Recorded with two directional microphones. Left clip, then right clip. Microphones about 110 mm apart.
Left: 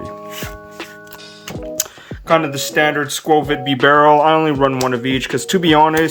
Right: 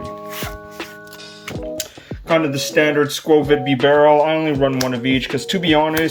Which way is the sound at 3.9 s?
45° left (ahead or behind).